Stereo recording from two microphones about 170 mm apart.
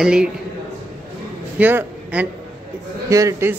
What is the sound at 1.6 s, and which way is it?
A man's voice, 10° right (ahead or behind).